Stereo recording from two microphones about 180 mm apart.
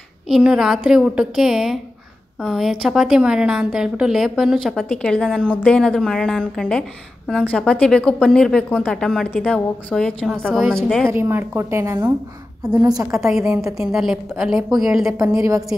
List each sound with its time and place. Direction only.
0.3 s a woman's voice: 5° right (ahead or behind)
11.1 s a woman's voice: 15° right (ahead or behind)
13.1 s a woman's voice: centre (ahead or behind)
15.1 s a woman's voice: 10° right (ahead or behind)